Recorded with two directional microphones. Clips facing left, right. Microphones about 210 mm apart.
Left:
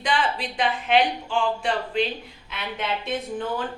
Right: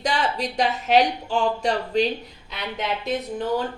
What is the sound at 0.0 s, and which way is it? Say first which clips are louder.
Speech: right 1 dB; 40° right (ahead or behind).